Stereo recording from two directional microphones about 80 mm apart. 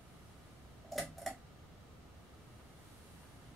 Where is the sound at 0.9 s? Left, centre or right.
Centre.